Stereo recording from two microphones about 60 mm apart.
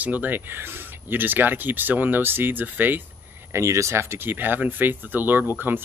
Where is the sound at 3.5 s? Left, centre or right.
Right.